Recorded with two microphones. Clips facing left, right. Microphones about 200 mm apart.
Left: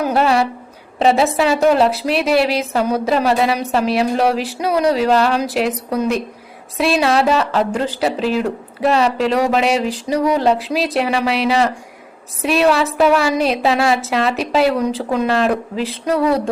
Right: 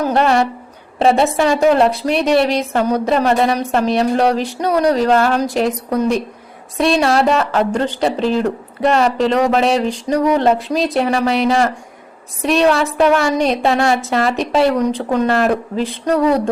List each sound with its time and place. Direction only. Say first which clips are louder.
0.0 s a woman's voice: right 1 dB; 5° left (ahead or behind)